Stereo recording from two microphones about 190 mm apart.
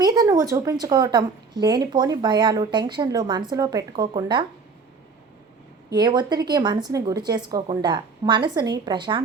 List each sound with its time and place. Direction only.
0.0 s a woman's voice: 20° right (ahead or behind)
5.9 s a woman's voice: 20° right (ahead or behind)